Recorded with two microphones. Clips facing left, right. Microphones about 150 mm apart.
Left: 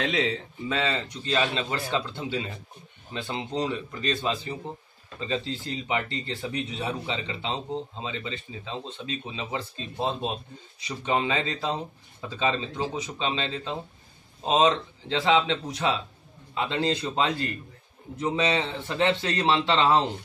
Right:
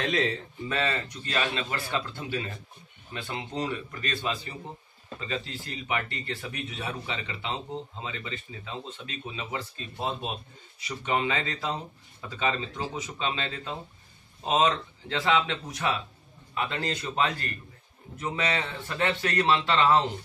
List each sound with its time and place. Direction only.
0.1 s speech: 15° left (ahead or behind)